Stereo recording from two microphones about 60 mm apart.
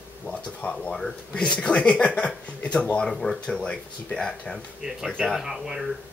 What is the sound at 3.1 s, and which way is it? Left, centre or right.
Speech, centre.